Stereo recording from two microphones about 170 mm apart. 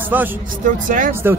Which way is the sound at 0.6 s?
50° right (ahead or behind).